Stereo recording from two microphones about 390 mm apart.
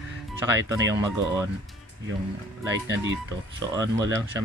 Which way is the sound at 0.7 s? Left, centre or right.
Centre.